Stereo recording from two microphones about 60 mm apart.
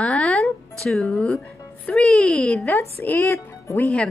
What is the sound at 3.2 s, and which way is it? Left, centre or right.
Speech, left.